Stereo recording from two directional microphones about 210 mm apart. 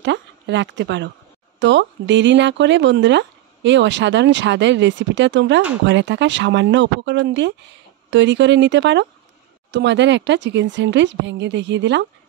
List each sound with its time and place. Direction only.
0.0 s a woman's voice: 60° right (ahead or behind)